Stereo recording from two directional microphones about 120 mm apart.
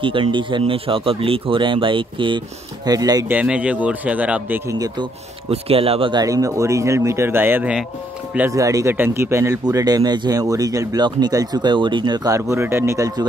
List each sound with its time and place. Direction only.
0.0 s speech: 45° right (ahead or behind)
3.3 s a man's voice: 10° right (ahead or behind)
4.6 s speech: 30° right (ahead or behind)
5.5 s speech: 55° right (ahead or behind)
6.2 s speech: 30° right (ahead or behind)
12.4 s speech: 20° right (ahead or behind)